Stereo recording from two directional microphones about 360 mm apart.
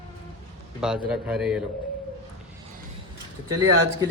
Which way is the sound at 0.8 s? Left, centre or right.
Centre.